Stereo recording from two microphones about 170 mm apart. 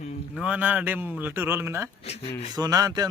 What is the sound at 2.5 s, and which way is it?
Speech, 20° right (ahead or behind).